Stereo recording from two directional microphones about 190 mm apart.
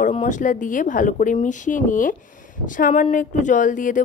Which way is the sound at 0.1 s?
40° left (ahead or behind).